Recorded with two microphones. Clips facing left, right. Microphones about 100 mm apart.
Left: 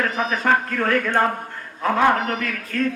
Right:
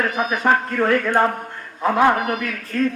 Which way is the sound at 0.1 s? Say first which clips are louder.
Right 1 dB; 10° right (ahead or behind).